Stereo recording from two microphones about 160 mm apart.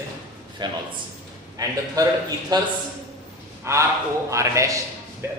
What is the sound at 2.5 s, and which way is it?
Speech, 25° right (ahead or behind).